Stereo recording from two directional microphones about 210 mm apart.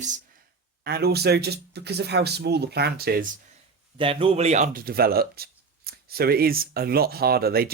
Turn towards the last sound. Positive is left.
turn(degrees=-45)  # may be behind; listen again after turning